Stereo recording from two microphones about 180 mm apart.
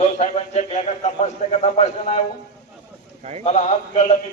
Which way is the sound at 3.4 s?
40° left (ahead or behind).